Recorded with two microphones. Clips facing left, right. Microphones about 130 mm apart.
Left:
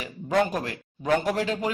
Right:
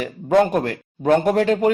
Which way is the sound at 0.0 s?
50° right (ahead or behind).